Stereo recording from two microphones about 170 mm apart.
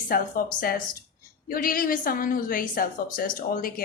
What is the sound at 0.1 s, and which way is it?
Speech, 60° left (ahead or behind).